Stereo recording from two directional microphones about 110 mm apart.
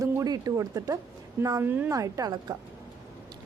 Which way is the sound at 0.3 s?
30° right (ahead or behind).